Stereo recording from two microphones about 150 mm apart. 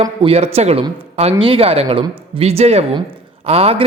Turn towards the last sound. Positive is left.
turn(degrees=-45)  # may be behind; listen again after turning